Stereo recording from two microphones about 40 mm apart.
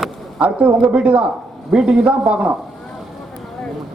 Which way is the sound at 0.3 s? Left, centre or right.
Right.